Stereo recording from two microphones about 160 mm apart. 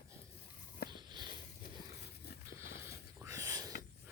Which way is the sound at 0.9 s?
30° right (ahead or behind).